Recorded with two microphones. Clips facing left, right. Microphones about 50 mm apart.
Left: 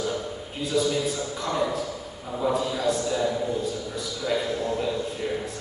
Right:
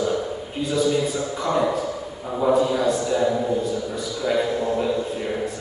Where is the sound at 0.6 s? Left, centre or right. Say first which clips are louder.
Right 4 dB; centre.